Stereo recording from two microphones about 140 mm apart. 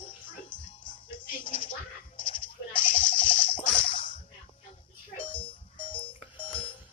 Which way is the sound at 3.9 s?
35° left (ahead or behind).